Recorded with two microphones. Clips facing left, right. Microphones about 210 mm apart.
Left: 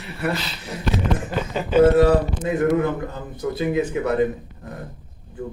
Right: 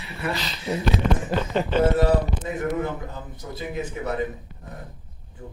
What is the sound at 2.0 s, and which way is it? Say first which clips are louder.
A man's voice: left 5 dB; 70° left (ahead or behind).